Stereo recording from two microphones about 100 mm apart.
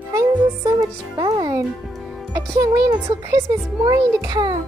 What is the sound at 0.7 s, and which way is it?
A child's voice, 45° right (ahead or behind).